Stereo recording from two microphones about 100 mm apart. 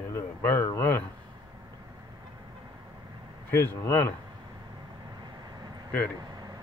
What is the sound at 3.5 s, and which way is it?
Speech, 20° left (ahead or behind).